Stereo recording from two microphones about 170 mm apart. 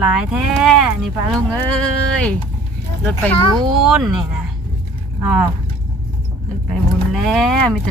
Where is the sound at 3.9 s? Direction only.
5° right (ahead or behind).